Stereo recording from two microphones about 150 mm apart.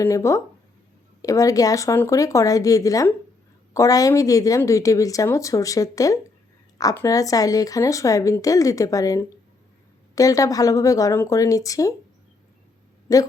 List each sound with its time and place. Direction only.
0.0 s speech: 20° left (ahead or behind)
13.1 s speech: 25° left (ahead or behind)